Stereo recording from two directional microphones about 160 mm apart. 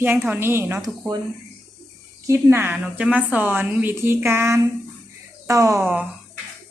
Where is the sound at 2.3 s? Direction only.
15° right (ahead or behind).